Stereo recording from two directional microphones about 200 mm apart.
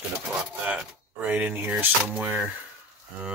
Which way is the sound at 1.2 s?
10° right (ahead or behind).